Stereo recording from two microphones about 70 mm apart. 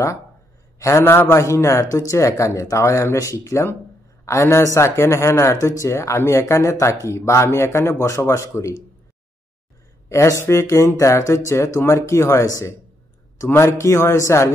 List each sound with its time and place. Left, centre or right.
0.7 s a man's voice: left
1.0 s speech: left
10.0 s speech: left